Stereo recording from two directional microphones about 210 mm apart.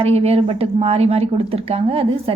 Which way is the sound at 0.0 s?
30° right (ahead or behind).